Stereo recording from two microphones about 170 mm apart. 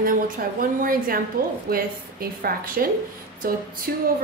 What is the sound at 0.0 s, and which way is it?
A woman's voice, 55° right (ahead or behind).